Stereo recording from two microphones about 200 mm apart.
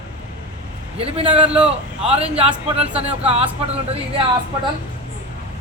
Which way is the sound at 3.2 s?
30° right (ahead or behind).